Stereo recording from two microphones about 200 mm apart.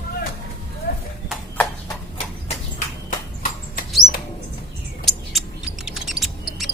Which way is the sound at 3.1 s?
40° left (ahead or behind).